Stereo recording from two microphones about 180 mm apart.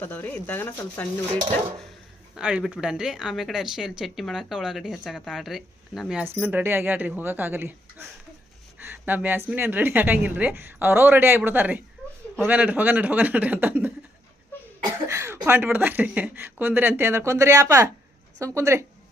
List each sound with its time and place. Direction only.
0.0 s speech: 10° left (ahead or behind)
2.3 s speech: 5° right (ahead or behind)
15.0 s speech: 15° right (ahead or behind)